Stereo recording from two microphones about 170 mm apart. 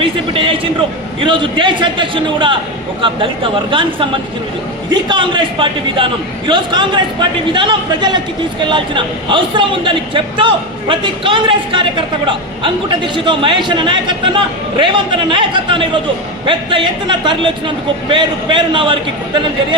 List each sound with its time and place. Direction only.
0.0 s a man's voice: 30° right (ahead or behind)
5.0 s a man's voice: 30° right (ahead or behind)